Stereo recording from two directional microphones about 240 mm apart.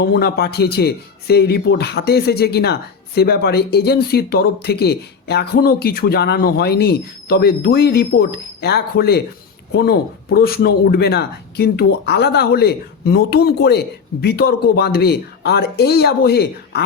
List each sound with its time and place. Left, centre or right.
0.0 s a man's voice: left